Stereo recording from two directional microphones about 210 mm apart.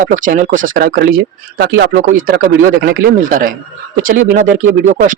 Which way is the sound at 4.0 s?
40° right (ahead or behind).